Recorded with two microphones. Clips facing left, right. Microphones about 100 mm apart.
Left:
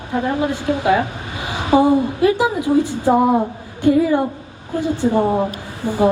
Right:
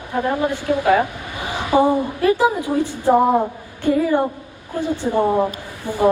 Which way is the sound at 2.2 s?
15° left (ahead or behind).